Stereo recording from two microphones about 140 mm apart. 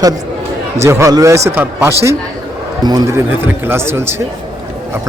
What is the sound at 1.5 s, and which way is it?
Speech, 15° right (ahead or behind).